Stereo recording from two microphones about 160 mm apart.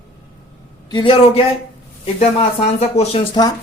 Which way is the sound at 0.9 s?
30° left (ahead or behind).